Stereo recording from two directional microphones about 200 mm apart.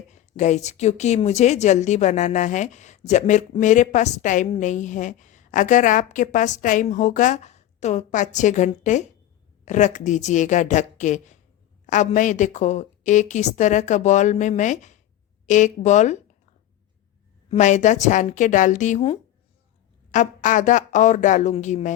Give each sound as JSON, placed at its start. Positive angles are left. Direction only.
{"t": 0.1, "sound": "a woman's voice", "side_deg": 35}
{"t": 17.5, "sound": "a woman's voice", "side_deg": 35}